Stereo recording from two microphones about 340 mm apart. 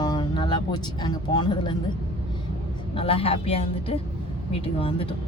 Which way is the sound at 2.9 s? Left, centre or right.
Centre.